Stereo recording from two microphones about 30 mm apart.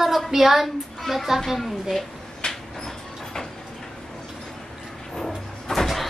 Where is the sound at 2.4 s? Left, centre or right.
Left.